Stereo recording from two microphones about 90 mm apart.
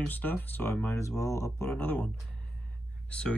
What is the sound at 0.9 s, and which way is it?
Speech, 35° left (ahead or behind).